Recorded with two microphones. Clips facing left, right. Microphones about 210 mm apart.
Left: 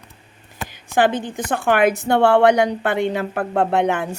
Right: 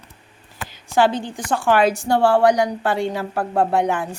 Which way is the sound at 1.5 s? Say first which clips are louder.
Even; 55° left (ahead or behind).